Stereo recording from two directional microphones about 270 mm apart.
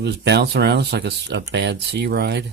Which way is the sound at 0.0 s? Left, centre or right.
Right.